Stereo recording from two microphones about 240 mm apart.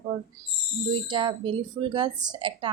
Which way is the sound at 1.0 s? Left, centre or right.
Centre.